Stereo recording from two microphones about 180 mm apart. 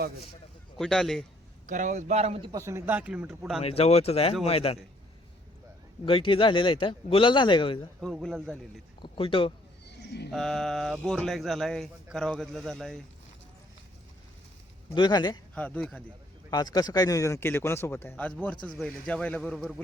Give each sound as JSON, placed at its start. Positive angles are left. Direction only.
{"t": 0.8, "sound": "speech", "side_deg": 5}
{"t": 1.6, "sound": "a man's voice", "side_deg": -45}
{"t": 2.5, "sound": "speech", "side_deg": -15}
{"t": 3.6, "sound": "speech", "side_deg": 35}
{"t": 6.1, "sound": "speech", "side_deg": 30}
{"t": 8.0, "sound": "speech", "side_deg": 0}
{"t": 9.0, "sound": "speech", "side_deg": 30}
{"t": 9.8, "sound": "a sound", "side_deg": 70}
{"t": 10.3, "sound": "speech", "side_deg": 0}
{"t": 14.9, "sound": "speech", "side_deg": 25}
{"t": 15.5, "sound": "speech", "side_deg": 5}
{"t": 16.5, "sound": "speech", "side_deg": 20}